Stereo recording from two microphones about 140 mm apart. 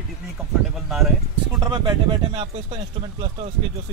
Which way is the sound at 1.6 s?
30° right (ahead or behind).